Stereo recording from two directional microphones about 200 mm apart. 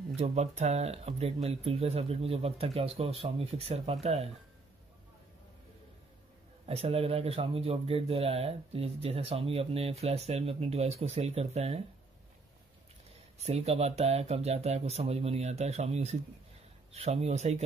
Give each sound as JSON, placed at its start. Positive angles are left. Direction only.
{"t": 0.1, "sound": "a man's voice", "side_deg": -35}
{"t": 6.6, "sound": "a man's voice", "side_deg": -30}
{"t": 13.4, "sound": "a man's voice", "side_deg": -30}